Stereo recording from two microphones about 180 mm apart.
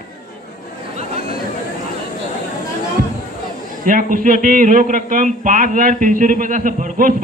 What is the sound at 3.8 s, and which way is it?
A man's voice, 50° right (ahead or behind).